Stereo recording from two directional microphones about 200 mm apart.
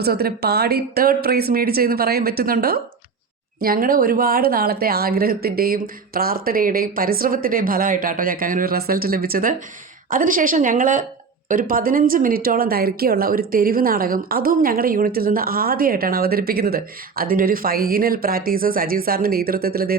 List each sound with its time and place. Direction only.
0.0 s a woman's voice: 50° right (ahead or behind)